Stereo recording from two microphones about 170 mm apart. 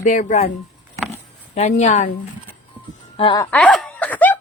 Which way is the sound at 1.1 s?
40° left (ahead or behind).